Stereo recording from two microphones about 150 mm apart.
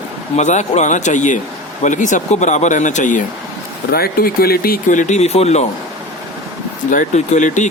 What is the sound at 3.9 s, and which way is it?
Speech, 85° left.